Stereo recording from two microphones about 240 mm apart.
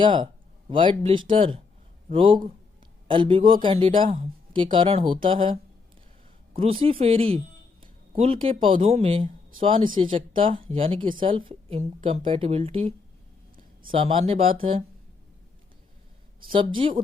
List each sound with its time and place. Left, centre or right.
0.0 s speech: centre
6.6 s speech: right
16.5 s speech: right